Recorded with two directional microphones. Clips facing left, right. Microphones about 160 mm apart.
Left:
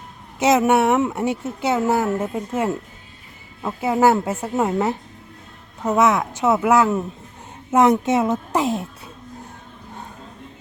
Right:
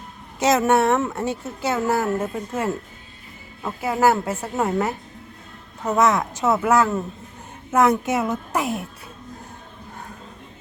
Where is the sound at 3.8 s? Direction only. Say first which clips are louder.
Left 2 dB; 20° left (ahead or behind).